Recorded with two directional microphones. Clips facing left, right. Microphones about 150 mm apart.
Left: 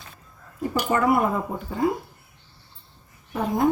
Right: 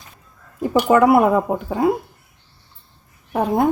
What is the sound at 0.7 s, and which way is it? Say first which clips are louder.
Speech: right 8 dB; 90° right.